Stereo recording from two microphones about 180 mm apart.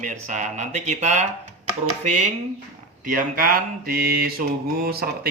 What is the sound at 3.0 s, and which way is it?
Speech, 50° right (ahead or behind).